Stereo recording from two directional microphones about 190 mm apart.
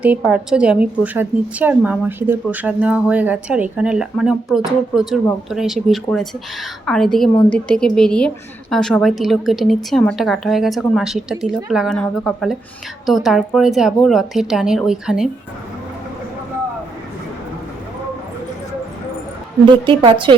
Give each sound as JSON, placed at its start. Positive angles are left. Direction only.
{"t": 0.0, "sound": "a woman's voice", "side_deg": -5}
{"t": 19.6, "sound": "a woman's voice", "side_deg": -25}